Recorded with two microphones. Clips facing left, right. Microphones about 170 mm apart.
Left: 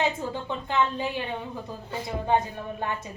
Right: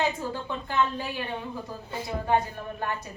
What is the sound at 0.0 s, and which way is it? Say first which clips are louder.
A woman's voice: left 1 dB; 20° left (ahead or behind).